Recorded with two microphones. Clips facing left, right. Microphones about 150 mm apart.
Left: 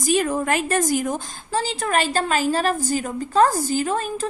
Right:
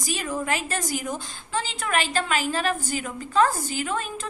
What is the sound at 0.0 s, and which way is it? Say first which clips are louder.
A woman's voice: left 8 dB; 55° left (ahead or behind).